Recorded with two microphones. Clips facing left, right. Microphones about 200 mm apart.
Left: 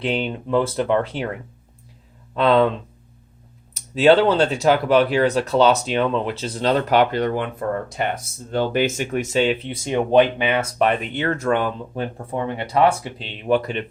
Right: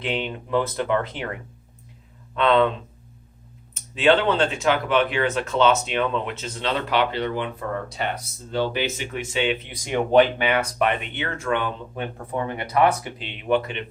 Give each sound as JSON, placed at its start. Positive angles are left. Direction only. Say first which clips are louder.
{"t": 0.0, "sound": "speech", "louder": "left 4 dB", "side_deg": 30}
{"t": 3.8, "sound": "speech", "louder": "left 5 dB", "side_deg": 40}
{"t": 11.0, "sound": "speech", "louder": "left 7 dB", "side_deg": 40}
{"t": 12.1, "sound": "speech", "louder": "left 2 dB", "side_deg": 25}
{"t": 13.5, "sound": "speech", "louder": "left 3 dB", "side_deg": 40}